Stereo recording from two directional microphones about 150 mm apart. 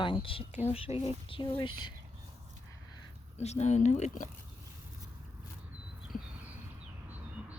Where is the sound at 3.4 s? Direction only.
50° left (ahead or behind).